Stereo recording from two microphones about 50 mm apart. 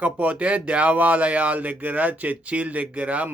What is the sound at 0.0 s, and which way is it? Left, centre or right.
Speech, right.